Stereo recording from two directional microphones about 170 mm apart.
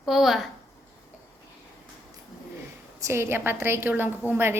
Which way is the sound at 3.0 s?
15° right (ahead or behind).